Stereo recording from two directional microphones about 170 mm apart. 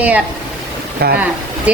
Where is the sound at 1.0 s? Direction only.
70° right (ahead or behind).